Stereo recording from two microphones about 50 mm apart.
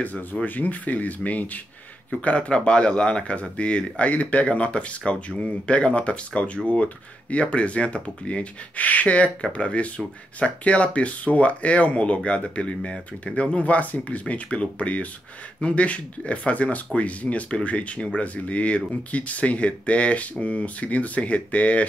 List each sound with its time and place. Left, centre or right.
0.0 s speech: left